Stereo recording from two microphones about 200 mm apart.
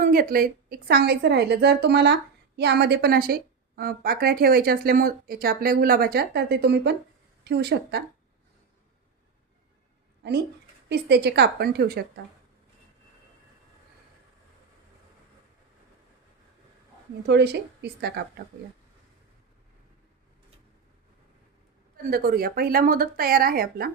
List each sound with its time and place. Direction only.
0.0 s a woman's voice: 45° right (ahead or behind)
10.8 s a woman's voice: 55° right (ahead or behind)
17.2 s a woman's voice: 55° right (ahead or behind)
22.1 s a woman's voice: 45° right (ahead or behind)